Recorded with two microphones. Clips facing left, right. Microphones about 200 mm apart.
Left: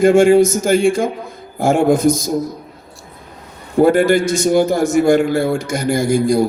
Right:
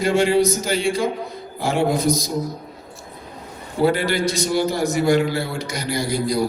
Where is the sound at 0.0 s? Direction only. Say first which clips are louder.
Left 8 dB; 50° left (ahead or behind).